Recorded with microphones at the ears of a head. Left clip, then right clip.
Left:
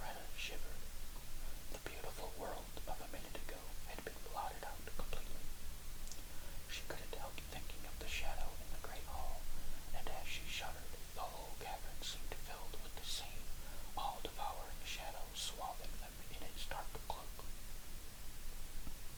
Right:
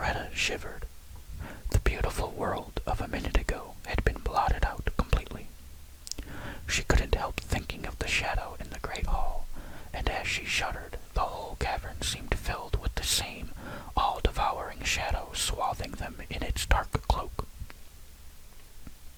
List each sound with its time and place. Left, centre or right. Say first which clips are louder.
0.0 s whispering: right 18 dB; right